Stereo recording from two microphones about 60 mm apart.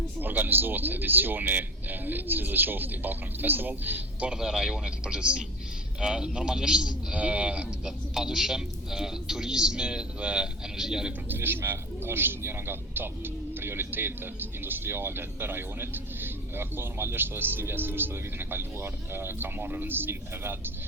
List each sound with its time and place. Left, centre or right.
0.2 s speech: right
4.4 s a man's voice: centre
7.9 s a man's voice: centre
11.3 s speech: right